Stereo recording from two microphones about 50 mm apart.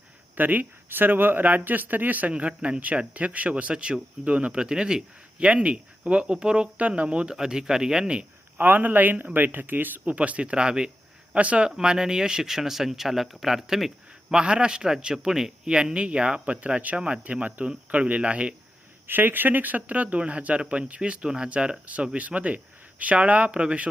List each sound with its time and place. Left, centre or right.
0.3 s a man's voice: right
2.3 s speech: right
8.5 s a man's voice: right
11.7 s speech: centre
14.3 s speech: centre
19.0 s speech: right